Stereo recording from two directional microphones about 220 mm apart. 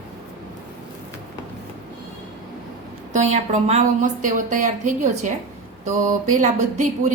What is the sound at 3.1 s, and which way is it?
A woman's voice, 30° right (ahead or behind).